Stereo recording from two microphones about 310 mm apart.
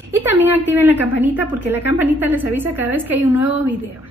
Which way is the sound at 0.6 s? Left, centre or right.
Left.